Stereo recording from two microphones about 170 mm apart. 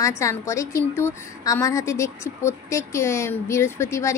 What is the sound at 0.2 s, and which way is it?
A woman's voice, 15° left (ahead or behind).